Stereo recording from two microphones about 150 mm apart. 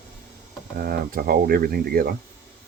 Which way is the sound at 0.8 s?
80° right.